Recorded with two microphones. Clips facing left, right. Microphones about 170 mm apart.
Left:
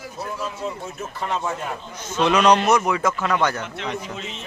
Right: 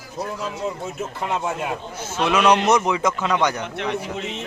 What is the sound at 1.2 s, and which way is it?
A man's voice, 15° right (ahead or behind).